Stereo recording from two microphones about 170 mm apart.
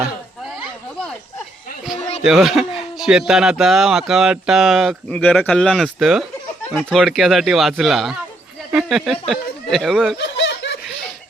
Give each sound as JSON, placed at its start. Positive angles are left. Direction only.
{"t": 2.2, "sound": "speech", "side_deg": 0}
{"t": 10.2, "sound": "snicker", "side_deg": 90}